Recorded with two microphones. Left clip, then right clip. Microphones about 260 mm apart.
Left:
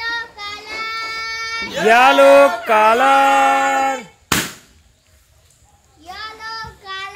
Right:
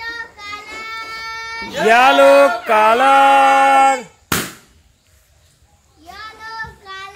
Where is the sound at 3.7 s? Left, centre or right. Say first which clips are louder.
Right 6 dB; right.